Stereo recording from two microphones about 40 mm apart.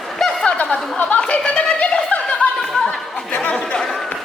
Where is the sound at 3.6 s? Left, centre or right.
Centre.